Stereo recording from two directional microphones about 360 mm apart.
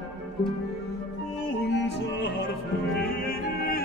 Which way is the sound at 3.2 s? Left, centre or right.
Left.